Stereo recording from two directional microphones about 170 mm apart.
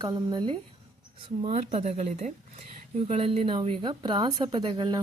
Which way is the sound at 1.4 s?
40° right (ahead or behind).